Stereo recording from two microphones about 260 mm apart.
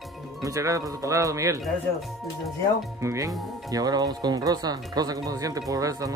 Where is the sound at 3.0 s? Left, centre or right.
Centre.